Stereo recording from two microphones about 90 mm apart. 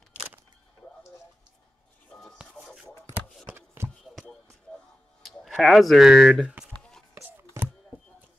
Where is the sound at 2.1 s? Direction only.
10° left (ahead or behind).